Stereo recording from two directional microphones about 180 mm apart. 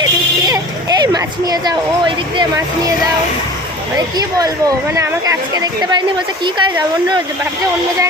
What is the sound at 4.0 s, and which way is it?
Speech, 20° right (ahead or behind).